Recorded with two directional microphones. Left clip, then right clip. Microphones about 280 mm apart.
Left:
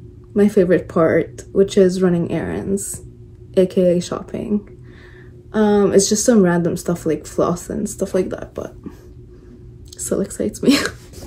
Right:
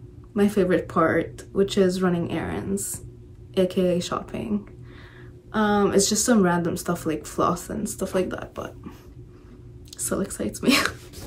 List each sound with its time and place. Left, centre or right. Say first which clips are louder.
0.3 s speech: left 7 dB; right
9.9 s speech: left 6 dB; right